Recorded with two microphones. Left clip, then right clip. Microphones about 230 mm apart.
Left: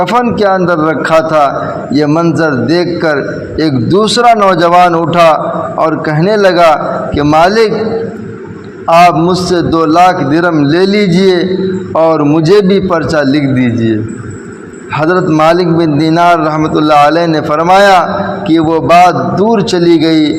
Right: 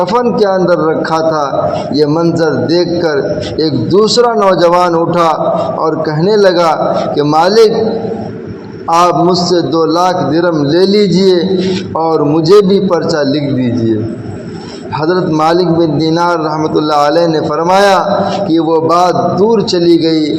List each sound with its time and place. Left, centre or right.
0.0 s a man's voice: left
4.2 s a man's voice: left
9.4 s a man's voice: left
15.0 s a man's voice: left